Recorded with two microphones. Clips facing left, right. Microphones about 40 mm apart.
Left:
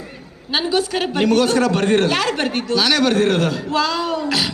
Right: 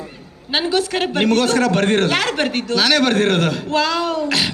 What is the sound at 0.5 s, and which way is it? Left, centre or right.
A man's voice, right.